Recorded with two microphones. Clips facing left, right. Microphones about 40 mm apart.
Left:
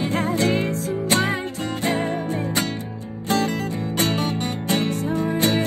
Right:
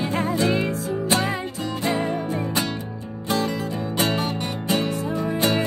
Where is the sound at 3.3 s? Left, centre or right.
Left.